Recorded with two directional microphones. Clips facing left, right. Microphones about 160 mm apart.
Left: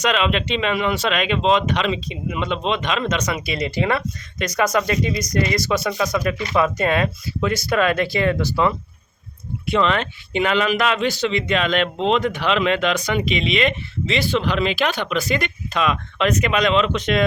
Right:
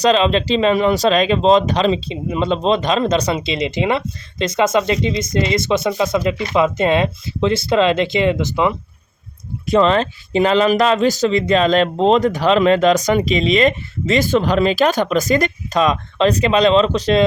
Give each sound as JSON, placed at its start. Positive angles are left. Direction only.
{"t": 0.0, "sound": "speech", "side_deg": -30}
{"t": 9.6, "sound": "speech", "side_deg": -35}